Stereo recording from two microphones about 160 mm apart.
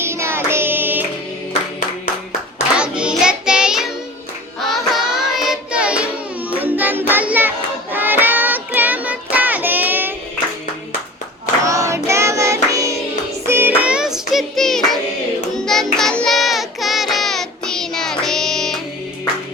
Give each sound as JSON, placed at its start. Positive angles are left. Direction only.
{"t": 0.0, "sound": "child singing", "side_deg": -15}
{"t": 2.7, "sound": "child singing", "side_deg": -5}
{"t": 11.6, "sound": "child singing", "side_deg": -20}
{"t": 13.5, "sound": "music", "side_deg": -15}
{"t": 15.5, "sound": "child singing", "side_deg": 5}